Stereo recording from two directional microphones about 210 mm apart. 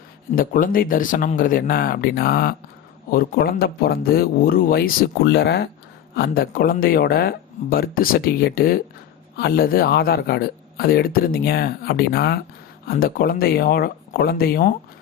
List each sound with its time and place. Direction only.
0.3 s speech: 40° left (ahead or behind)